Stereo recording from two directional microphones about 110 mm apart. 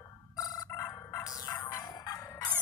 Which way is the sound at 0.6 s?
25° left (ahead or behind).